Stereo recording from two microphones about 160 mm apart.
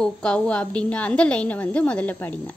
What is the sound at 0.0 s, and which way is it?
A woman's voice, 5° left (ahead or behind).